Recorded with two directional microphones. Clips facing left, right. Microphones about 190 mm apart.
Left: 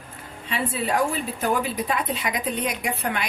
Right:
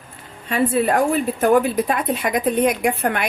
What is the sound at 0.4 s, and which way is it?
A woman's voice, 50° right (ahead or behind).